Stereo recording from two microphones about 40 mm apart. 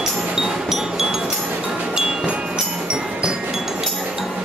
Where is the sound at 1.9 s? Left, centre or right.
Centre.